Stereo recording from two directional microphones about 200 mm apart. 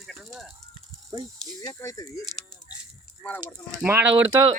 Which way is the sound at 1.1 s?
20° right (ahead or behind).